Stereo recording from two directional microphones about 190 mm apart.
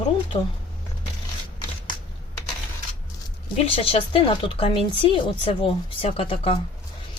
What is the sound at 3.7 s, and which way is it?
A woman's voice, 30° left (ahead or behind).